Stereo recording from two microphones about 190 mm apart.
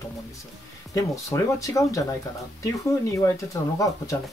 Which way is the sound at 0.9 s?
15° left (ahead or behind).